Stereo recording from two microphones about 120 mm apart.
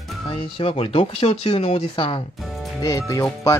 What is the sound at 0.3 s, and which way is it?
Speech, 50° left (ahead or behind).